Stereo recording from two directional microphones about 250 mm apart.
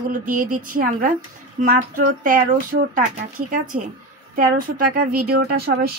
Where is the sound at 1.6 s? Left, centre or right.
Right.